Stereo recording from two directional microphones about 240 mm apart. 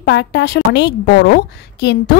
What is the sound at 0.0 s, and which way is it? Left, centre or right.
A woman's voice, left.